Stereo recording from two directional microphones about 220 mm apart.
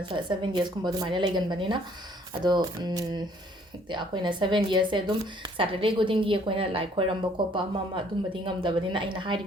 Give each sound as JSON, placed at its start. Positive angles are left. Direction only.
{"t": 0.1, "sound": "speech", "side_deg": -20}